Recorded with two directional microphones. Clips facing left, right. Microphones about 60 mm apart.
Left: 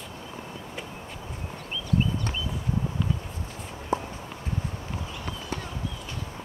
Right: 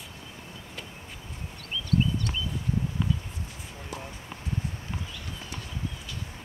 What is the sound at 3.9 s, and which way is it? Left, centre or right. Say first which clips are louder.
Walk: left 11 dB; left.